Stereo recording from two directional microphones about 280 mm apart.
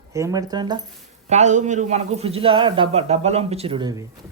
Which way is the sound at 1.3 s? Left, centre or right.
Right.